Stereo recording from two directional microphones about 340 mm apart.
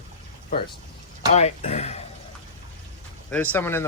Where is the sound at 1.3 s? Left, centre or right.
Centre.